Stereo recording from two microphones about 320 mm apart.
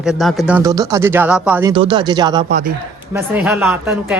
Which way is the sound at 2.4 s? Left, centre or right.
Right.